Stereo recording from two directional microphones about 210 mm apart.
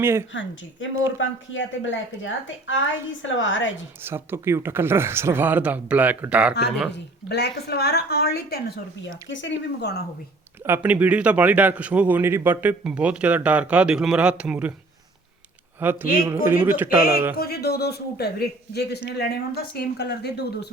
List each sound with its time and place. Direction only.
0.0 s a man's voice: 10° right (ahead or behind)
0.8 s a woman's voice: 65° left (ahead or behind)
4.0 s a man's voice: 10° right (ahead or behind)
6.9 s a man's voice: 50° left (ahead or behind)
10.6 s a man's voice: 10° right (ahead or behind)
15.8 s a man's voice: 10° right (ahead or behind)
17.3 s a man's voice: 50° left (ahead or behind)